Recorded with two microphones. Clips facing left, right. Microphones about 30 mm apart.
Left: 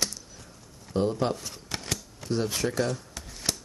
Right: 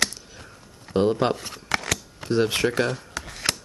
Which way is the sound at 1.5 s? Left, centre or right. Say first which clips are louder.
Right 8 dB; right.